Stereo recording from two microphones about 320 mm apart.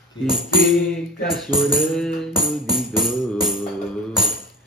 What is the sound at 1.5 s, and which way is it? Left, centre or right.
Music, centre.